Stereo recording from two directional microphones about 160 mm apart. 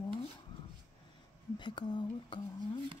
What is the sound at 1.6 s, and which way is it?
Speech, 30° left (ahead or behind).